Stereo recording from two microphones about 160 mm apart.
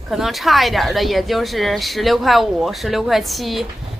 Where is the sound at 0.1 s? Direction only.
Centre (ahead or behind).